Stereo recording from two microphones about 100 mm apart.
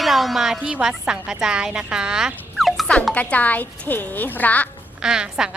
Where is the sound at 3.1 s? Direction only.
15° left (ahead or behind).